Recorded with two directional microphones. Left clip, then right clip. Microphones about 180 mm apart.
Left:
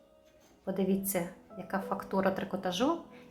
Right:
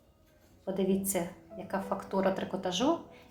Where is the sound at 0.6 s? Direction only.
25° left (ahead or behind).